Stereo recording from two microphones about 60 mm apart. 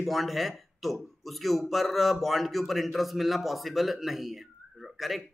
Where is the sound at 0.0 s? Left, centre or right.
Centre.